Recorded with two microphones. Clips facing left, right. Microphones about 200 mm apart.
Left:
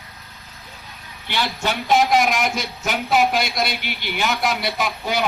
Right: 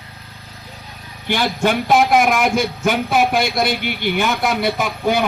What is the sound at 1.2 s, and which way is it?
A man's voice, 50° right (ahead or behind).